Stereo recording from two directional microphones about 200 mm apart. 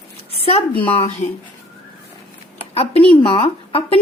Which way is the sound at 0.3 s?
30° left (ahead or behind).